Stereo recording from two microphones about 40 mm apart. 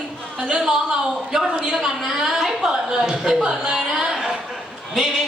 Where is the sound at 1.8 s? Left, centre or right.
Centre.